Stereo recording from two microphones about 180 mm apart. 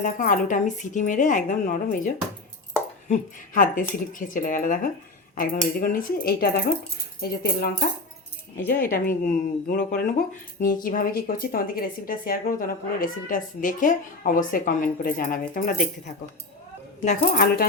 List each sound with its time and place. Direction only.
0.0 s speech: 50° left (ahead or behind)
8.7 s speech: 50° left (ahead or behind)
17.3 s speech: 55° left (ahead or behind)